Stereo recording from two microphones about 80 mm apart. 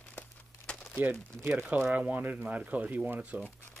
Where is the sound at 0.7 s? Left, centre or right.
Centre.